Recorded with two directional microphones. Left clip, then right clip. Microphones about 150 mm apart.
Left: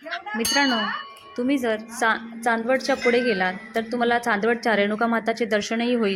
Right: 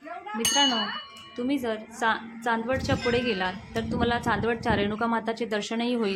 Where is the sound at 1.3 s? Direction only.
25° left (ahead or behind).